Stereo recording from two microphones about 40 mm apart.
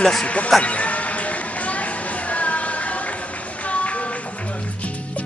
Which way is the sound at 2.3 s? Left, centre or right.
Left.